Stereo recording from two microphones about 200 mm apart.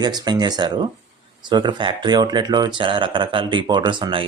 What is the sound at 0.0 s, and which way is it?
Speech, 20° right (ahead or behind).